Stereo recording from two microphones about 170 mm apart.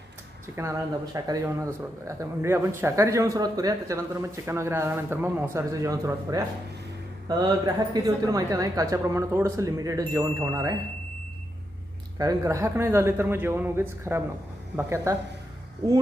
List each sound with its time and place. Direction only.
1.1 s a man's voice: 20° right (ahead or behind)
12.1 s a man's voice: 20° right (ahead or behind)